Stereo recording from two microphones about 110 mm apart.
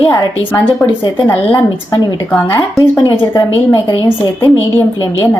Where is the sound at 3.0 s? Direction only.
30° left (ahead or behind).